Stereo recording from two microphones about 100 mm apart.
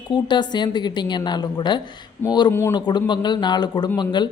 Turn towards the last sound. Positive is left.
turn(degrees=50)  # may be behind; listen again after turning